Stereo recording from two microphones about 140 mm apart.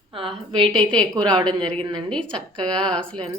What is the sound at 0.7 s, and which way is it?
Speech, 5° left (ahead or behind).